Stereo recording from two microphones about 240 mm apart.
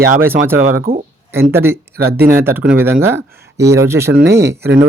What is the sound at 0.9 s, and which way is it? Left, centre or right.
Speech, right.